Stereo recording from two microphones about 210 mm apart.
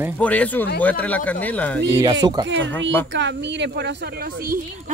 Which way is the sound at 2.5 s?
60° right (ahead or behind).